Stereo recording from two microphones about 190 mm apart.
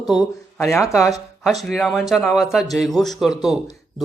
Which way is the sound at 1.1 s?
Centre (ahead or behind).